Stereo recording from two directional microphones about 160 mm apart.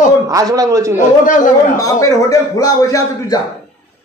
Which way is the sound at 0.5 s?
20° right (ahead or behind).